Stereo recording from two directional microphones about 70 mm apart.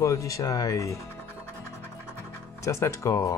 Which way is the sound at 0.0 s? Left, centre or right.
Left.